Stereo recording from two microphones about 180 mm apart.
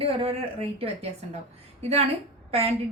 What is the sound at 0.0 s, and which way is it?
Speech, 30° right (ahead or behind).